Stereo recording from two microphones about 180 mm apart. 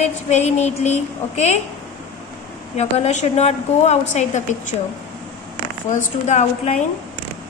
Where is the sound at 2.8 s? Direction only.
40° left (ahead or behind).